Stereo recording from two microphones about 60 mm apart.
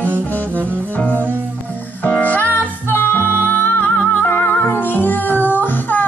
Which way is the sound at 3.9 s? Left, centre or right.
Left.